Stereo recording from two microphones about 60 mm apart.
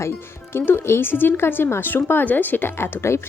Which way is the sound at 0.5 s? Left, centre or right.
Left.